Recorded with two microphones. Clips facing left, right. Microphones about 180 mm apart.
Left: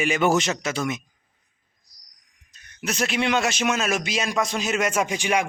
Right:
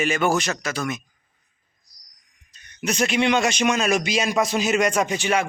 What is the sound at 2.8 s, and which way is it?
Speech, centre (ahead or behind).